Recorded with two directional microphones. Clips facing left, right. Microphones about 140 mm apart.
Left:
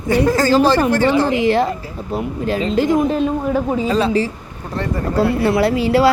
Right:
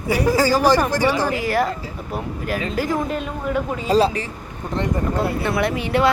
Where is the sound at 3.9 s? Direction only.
30° right (ahead or behind).